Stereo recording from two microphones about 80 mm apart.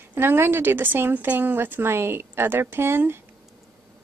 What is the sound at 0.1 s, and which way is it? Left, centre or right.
A woman's voice, right.